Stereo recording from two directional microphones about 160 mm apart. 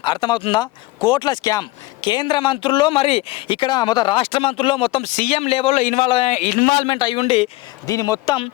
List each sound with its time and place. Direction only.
0.0 s speech: 30° left (ahead or behind)
5.1 s a man's voice: 50° left (ahead or behind)
6.8 s speech: 30° left (ahead or behind)
7.9 s speech: 20° left (ahead or behind)